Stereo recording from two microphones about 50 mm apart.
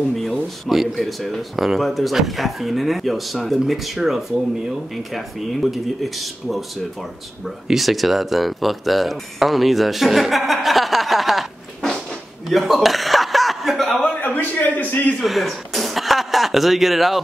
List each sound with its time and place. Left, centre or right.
0.1 s a sound: centre
0.7 s speech: centre
12.4 s chuckle: centre
14.2 s a man's voice: left
15.1 s speech: centre